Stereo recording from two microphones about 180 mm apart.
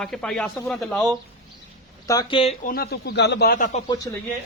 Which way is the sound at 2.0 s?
20° left (ahead or behind).